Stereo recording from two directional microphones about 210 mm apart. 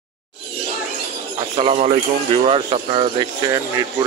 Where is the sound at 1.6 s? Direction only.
30° right (ahead or behind).